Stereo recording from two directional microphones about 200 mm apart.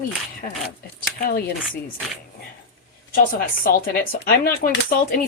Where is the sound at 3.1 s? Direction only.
45° left (ahead or behind).